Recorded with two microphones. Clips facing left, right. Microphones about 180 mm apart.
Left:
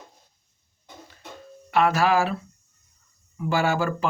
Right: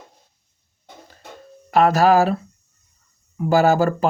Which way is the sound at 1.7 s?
40° right (ahead or behind).